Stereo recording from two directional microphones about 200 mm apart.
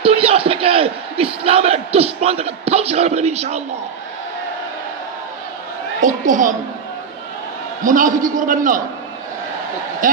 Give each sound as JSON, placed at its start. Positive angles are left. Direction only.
{"t": 0.0, "sound": "crowd", "side_deg": -30}
{"t": 6.0, "sound": "a woman's voice", "side_deg": -40}
{"t": 7.9, "sound": "a man's voice", "side_deg": -40}
{"t": 10.0, "sound": "speech", "side_deg": -40}